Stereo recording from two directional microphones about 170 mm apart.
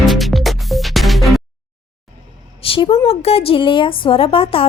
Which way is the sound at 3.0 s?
35° left (ahead or behind).